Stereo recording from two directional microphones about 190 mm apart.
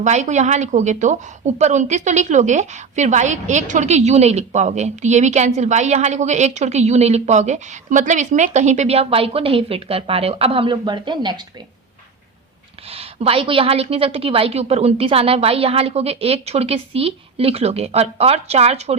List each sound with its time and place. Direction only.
0.0 s a woman's voice: 35° right (ahead or behind)
12.9 s a woman's voice: 30° right (ahead or behind)